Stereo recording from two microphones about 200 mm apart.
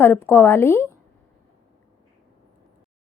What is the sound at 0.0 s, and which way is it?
Speech, 10° left (ahead or behind).